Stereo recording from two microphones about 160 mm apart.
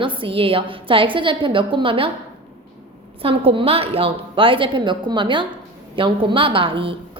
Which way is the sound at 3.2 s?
35° right (ahead or behind).